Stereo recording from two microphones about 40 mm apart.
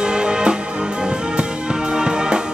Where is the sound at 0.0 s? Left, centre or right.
Right.